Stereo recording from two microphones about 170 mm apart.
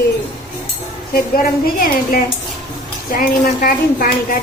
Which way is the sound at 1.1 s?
55° left (ahead or behind).